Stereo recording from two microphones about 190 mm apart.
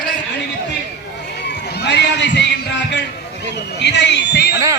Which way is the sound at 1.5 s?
65° left (ahead or behind).